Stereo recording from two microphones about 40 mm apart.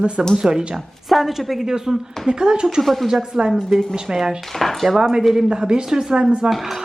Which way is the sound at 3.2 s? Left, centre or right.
Centre.